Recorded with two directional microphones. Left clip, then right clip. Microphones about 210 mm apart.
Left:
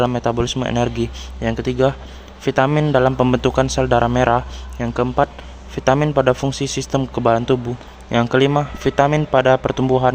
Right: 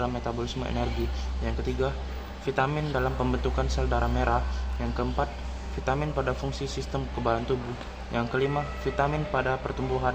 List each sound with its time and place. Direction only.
0.0 s a man's voice: 55° left (ahead or behind)